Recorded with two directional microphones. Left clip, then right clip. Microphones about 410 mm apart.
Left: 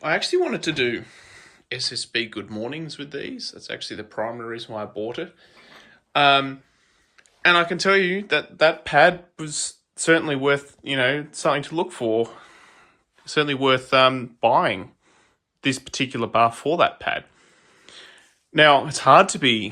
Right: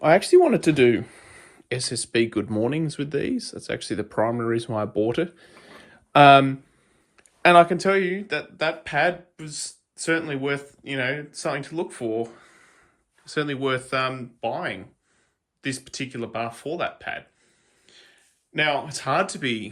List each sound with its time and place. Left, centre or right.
0.0 s speech: centre
17.8 s a sound: centre
18.5 s speech: centre